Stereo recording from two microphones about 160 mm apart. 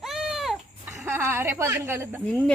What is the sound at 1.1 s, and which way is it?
A woman's voice, 15° right (ahead or behind).